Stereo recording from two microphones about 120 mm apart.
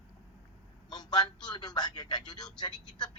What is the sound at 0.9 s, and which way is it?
A man's voice, 35° left (ahead or behind).